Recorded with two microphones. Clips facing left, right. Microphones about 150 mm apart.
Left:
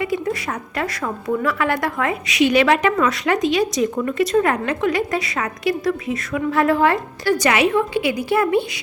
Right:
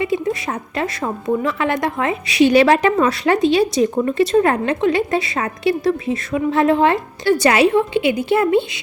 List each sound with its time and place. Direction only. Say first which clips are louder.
0.0 s speech: right 2 dB; 25° right (ahead or behind)